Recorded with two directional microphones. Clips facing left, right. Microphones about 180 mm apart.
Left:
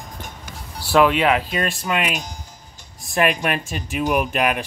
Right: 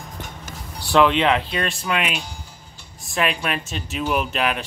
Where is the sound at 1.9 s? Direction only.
40° left (ahead or behind).